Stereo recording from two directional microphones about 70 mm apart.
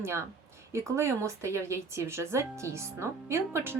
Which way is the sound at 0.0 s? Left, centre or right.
Right.